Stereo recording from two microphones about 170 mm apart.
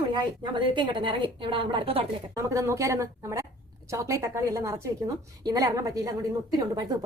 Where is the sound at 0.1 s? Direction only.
25° right (ahead or behind).